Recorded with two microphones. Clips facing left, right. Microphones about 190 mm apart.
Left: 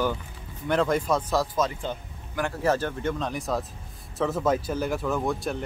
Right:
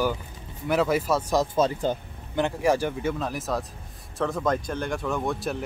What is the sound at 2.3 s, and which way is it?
Speech, 15° right (ahead or behind).